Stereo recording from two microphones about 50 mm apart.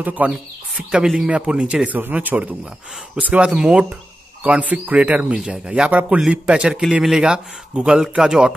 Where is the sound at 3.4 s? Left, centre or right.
Centre.